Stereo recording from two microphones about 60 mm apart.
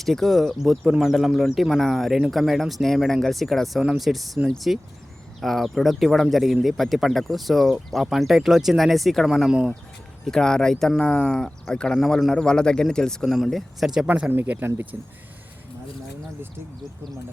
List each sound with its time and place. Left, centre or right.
0.0 s speech: centre
9.5 s speech: centre
10.2 s a man's voice: centre
11.9 s a man's voice: centre
13.2 s speech: centre
14.3 s speech: right
14.9 s speech: right